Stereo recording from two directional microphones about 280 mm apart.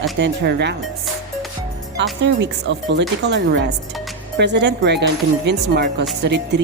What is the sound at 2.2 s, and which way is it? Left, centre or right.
Speech, right.